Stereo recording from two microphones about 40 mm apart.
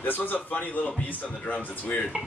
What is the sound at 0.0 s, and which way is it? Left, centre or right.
Speech, left.